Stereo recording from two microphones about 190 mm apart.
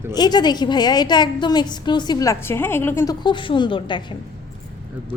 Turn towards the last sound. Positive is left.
turn(degrees=25)  # may be behind; listen again after turning